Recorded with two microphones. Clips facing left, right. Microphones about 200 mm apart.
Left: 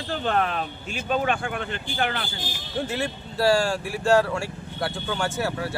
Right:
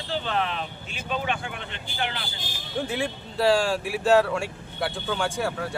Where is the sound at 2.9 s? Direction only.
Centre (ahead or behind).